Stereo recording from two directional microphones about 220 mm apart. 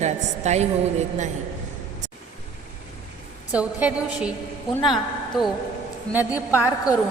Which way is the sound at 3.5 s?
5° right (ahead or behind).